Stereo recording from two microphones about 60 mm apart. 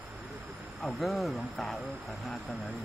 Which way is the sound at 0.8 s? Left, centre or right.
Centre.